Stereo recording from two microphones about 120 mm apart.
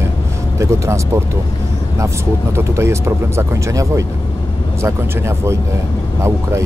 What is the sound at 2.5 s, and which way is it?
Speech, 25° right (ahead or behind).